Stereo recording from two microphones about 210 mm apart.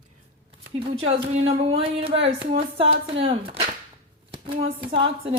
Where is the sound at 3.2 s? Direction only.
30° right (ahead or behind).